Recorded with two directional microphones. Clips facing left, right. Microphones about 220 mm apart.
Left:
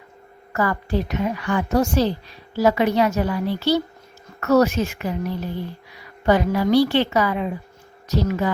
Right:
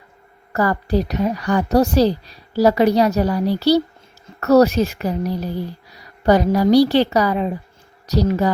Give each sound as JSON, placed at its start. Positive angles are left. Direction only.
{"t": 0.5, "sound": "a woman's voice", "side_deg": -35}